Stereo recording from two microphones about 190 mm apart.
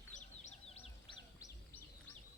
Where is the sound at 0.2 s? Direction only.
35° left (ahead or behind).